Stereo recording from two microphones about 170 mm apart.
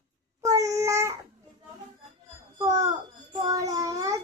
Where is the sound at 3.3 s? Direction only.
20° right (ahead or behind).